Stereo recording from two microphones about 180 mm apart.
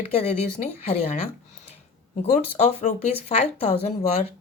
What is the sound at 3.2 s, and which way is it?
Speech, 35° left (ahead or behind).